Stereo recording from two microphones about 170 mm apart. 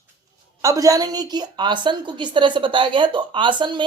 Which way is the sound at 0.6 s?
20° right (ahead or behind).